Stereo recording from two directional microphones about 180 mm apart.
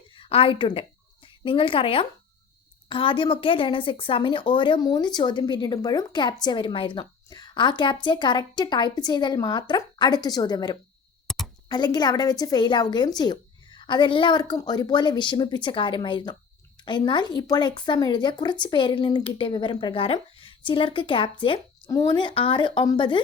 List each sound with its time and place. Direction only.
0.2 s a woman's voice: 30° left (ahead or behind)
11.3 s a sound: centre (ahead or behind)
11.7 s a woman's voice: 25° left (ahead or behind)